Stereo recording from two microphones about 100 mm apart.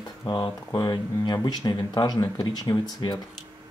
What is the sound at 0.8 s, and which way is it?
Speech, 40° left (ahead or behind).